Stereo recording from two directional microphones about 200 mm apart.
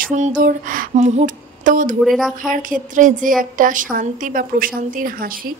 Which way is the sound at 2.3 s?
45° right (ahead or behind).